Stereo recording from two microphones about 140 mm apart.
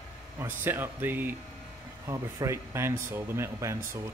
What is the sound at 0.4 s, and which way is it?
Speech, 15° right (ahead or behind).